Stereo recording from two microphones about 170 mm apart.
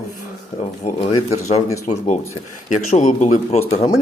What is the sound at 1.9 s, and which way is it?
Speech, 40° left (ahead or behind).